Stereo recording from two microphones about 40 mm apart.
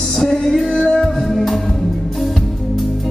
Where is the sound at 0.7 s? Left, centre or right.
Centre.